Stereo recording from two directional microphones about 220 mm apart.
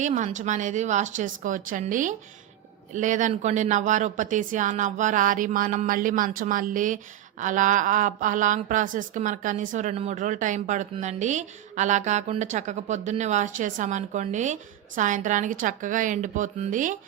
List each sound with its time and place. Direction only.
0.0 s speech: 35° right (ahead or behind)